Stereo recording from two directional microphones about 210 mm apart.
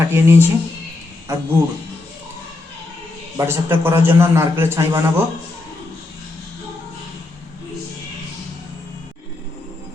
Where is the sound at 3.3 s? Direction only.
10° right (ahead or behind).